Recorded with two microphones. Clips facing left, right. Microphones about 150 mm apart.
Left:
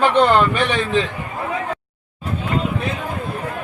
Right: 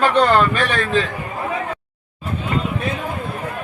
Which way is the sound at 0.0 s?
20° left (ahead or behind).